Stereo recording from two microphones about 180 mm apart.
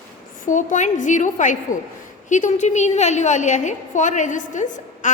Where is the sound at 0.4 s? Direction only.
45° left (ahead or behind).